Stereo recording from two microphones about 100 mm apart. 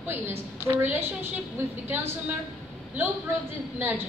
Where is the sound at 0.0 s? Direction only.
25° right (ahead or behind).